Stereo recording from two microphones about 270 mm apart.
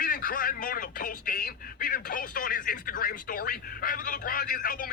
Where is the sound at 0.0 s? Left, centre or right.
Left.